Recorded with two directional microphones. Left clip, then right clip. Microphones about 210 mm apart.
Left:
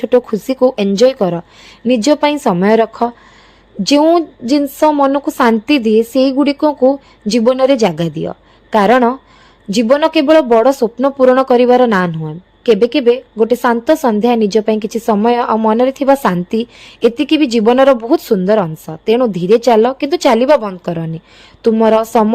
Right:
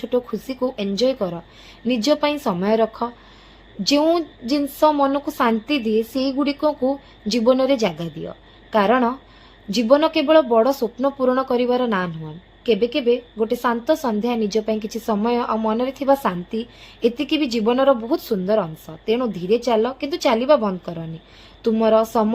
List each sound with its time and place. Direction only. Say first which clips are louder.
0.0 s a woman's voice: left 10 dB; 50° left (ahead or behind)